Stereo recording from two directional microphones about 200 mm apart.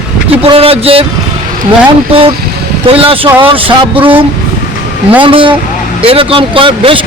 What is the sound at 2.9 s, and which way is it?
A man's voice, 25° right (ahead or behind).